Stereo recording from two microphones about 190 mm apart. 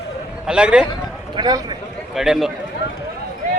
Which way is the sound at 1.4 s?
20° right (ahead or behind).